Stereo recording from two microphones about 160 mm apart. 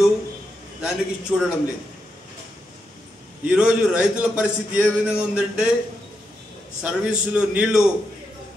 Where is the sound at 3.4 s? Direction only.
5° right (ahead or behind).